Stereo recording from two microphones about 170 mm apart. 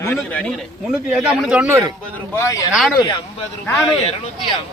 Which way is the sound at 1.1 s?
5° right (ahead or behind).